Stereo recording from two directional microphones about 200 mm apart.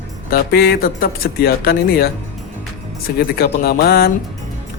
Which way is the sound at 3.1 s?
50° left (ahead or behind).